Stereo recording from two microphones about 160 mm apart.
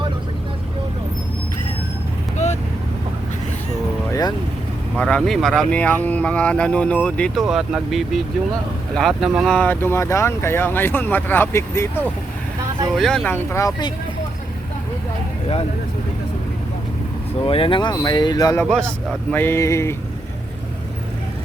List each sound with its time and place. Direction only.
2.4 s vehicle: 45° left (ahead or behind)
4.1 s vehicle: 25° left (ahead or behind)
4.9 s speech: 5° left (ahead or behind)
9.6 s speech: 10° left (ahead or behind)
13.0 s speech: 5° left (ahead or behind); by 13.9 s 25° left (ahead or behind)
17.4 s speech: 35° left (ahead or behind)
18.6 s speech: 5° left (ahead or behind)